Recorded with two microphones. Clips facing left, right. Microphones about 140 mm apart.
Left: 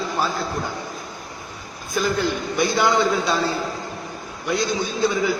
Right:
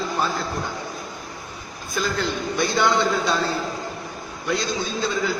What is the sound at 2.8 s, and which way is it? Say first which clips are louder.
Speech: left 1 dB; centre (ahead or behind).